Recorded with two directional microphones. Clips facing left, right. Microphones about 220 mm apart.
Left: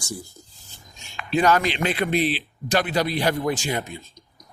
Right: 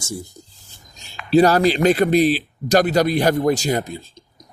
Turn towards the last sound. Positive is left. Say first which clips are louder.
# right 3 dB
turn(degrees=-30)  # may be behind; listen again after turning